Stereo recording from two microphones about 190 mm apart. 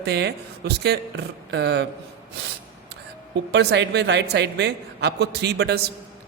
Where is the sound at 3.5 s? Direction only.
65° right (ahead or behind).